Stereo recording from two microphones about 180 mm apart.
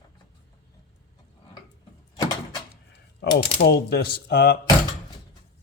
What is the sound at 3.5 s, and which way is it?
Speech, 65° left (ahead or behind).